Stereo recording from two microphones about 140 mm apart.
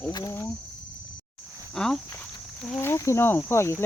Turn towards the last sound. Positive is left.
turn(degrees=20)  # may be behind; listen again after turning